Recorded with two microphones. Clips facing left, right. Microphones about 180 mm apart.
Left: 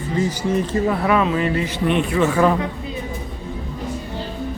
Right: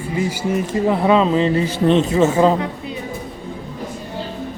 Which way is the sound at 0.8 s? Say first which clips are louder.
Right 6 dB; 20° right (ahead or behind).